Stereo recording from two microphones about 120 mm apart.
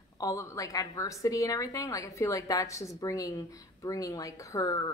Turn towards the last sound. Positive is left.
turn(degrees=30)  # may be behind; listen again after turning